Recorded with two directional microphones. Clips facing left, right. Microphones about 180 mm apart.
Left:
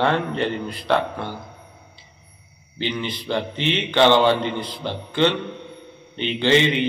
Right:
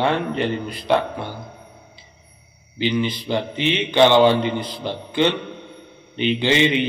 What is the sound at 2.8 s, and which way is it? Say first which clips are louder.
Speech: right 5 dB; 15° right (ahead or behind).